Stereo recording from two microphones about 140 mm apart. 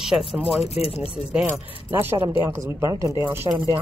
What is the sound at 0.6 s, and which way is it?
Speech, 45° left (ahead or behind).